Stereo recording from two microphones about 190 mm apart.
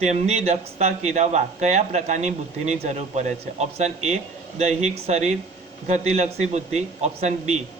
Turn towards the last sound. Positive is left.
turn(degrees=-35)  # may be behind; listen again after turning